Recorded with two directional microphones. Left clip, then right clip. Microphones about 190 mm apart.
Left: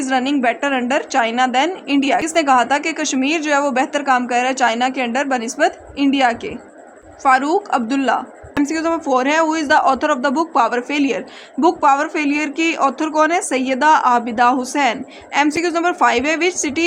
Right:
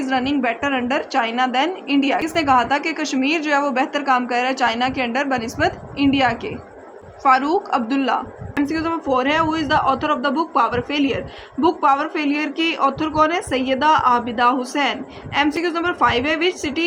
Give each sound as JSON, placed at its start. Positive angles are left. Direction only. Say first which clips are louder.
{"t": 0.0, "sound": "a woman's voice", "louder": "left 3 dB", "side_deg": 25}